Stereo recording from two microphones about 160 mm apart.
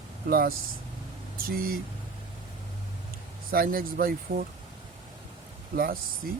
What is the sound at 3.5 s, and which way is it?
Speech, 65° right (ahead or behind).